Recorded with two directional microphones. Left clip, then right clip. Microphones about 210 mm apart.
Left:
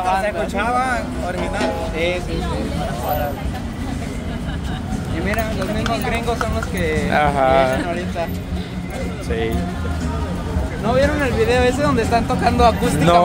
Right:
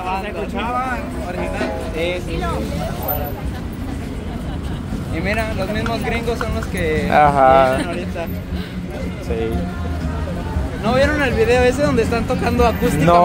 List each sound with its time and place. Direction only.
0.6 s speech: 20° left (ahead or behind)
5.2 s speech: 45° right (ahead or behind)
5.9 s speech: 20° right (ahead or behind)
10.9 s speech: 45° right (ahead or behind)
11.3 s speech: 15° right (ahead or behind)